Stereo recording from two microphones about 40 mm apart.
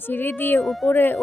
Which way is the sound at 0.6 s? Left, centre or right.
Centre.